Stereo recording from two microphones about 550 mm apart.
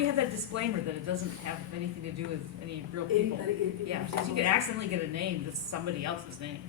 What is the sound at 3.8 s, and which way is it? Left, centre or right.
A woman's voice, right.